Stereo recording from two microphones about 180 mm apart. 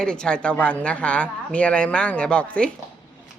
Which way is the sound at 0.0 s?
5° left (ahead or behind).